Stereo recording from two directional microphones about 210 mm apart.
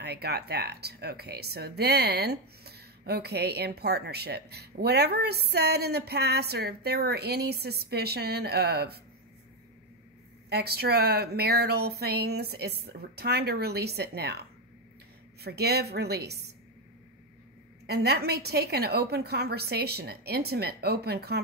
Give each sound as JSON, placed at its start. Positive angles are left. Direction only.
{"t": 0.0, "sound": "speech", "side_deg": -50}
{"t": 10.5, "sound": "speech", "side_deg": -50}
{"t": 15.4, "sound": "speech", "side_deg": -50}
{"t": 17.8, "sound": "speech", "side_deg": -50}